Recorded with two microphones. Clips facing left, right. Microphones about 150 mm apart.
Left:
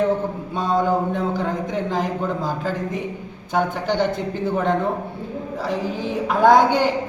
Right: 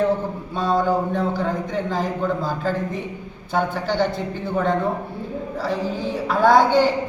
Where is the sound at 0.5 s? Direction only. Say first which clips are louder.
Even; 20° left (ahead or behind).